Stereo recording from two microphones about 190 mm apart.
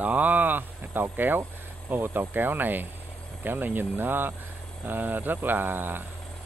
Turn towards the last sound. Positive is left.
turn(degrees=-10)  # may be behind; listen again after turning